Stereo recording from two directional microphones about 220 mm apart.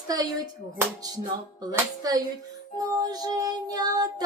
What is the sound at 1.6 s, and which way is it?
Music, 15° right (ahead or behind).